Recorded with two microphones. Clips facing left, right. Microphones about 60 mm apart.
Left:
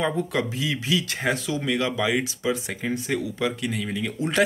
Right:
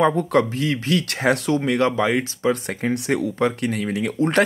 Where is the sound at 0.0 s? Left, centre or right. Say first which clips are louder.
Right 7 dB; right.